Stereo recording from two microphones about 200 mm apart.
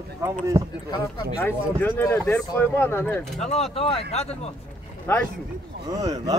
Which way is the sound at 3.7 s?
30° left (ahead or behind).